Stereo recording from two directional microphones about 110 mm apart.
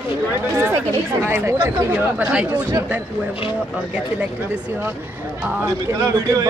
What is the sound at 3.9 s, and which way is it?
A man's voice, 10° right (ahead or behind).